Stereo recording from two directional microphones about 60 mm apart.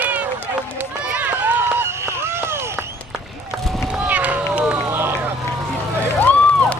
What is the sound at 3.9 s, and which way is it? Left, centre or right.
Run, right.